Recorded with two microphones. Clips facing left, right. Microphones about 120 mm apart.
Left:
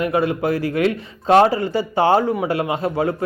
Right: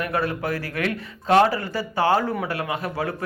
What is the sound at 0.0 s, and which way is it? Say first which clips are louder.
Speech: left 6 dB; 20° left (ahead or behind).